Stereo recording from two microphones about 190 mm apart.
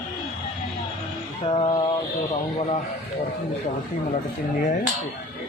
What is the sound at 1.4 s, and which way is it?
Mantra, 25° left (ahead or behind).